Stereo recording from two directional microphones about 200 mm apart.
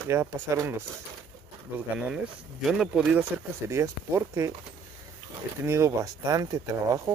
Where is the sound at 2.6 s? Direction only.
Centre (ahead or behind).